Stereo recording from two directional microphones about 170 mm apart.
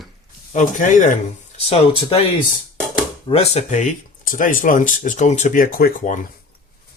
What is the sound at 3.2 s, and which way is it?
Speech, 35° left (ahead or behind).